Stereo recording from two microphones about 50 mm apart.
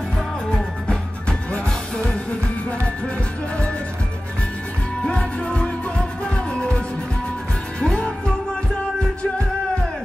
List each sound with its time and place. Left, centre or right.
1.5 s music: centre
5.0 s music: centre
7.8 s music: centre